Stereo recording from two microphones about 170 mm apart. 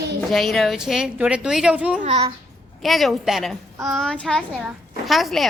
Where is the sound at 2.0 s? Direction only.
40° right (ahead or behind).